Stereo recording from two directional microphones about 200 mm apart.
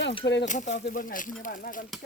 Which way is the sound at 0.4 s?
40° left (ahead or behind).